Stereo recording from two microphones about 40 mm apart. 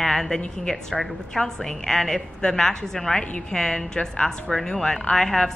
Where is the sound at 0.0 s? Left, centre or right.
Centre.